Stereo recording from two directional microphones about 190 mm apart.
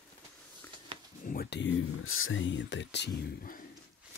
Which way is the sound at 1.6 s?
85° left.